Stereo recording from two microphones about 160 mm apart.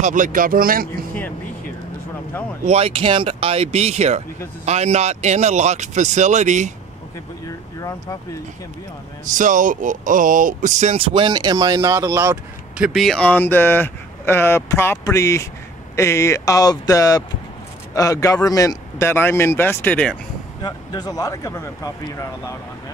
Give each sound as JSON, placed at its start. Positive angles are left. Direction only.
{"t": 0.0, "sound": "speech", "side_deg": -55}
{"t": 2.6, "sound": "speech", "side_deg": -40}
{"t": 7.4, "sound": "vehicle", "side_deg": 20}
{"t": 9.2, "sound": "speech", "side_deg": -55}
{"t": 12.7, "sound": "speech", "side_deg": -5}
{"t": 20.6, "sound": "speech", "side_deg": 25}